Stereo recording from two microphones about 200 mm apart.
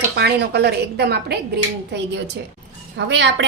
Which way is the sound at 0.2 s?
55° right (ahead or behind).